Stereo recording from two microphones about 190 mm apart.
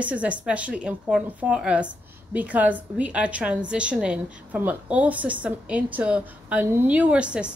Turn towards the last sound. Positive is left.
turn(degrees=-5)  # may be behind; listen again after turning